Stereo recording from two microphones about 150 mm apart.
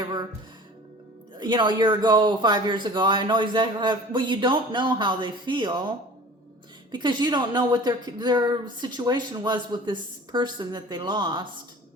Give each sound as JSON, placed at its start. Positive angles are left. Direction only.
{"t": 0.0, "sound": "music", "side_deg": -30}
{"t": 1.4, "sound": "speech", "side_deg": -30}
{"t": 6.9, "sound": "speech", "side_deg": -30}